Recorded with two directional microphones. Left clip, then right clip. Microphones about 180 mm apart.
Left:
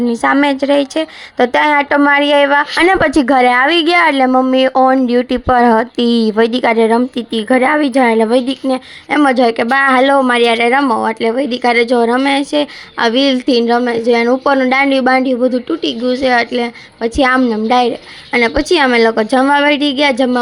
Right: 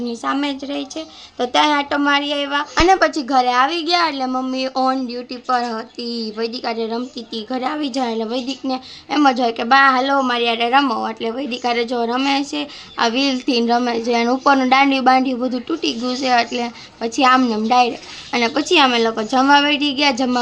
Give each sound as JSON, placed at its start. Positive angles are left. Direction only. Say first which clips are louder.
{"t": 0.1, "sound": "a woman's voice", "louder": "left 10 dB", "side_deg": 35}